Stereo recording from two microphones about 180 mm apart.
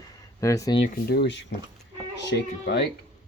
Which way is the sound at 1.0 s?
65° left (ahead or behind).